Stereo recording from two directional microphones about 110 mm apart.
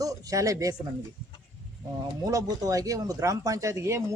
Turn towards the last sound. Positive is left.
turn(degrees=-25)  # may be behind; listen again after turning